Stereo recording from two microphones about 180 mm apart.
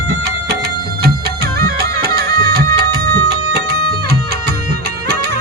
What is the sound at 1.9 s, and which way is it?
Music, 60° right (ahead or behind).